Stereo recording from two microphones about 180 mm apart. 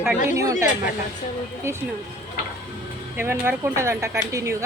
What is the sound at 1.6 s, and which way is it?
Speech, 15° right (ahead or behind).